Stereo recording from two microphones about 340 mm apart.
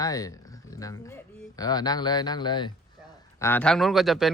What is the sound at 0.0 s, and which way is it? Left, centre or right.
Speech, centre.